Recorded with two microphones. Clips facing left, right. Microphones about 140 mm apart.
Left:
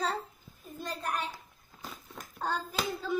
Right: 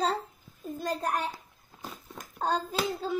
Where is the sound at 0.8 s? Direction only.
45° right (ahead or behind).